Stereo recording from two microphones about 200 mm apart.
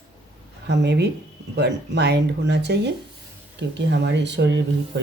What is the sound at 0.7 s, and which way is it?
Speech, 60° right (ahead or behind).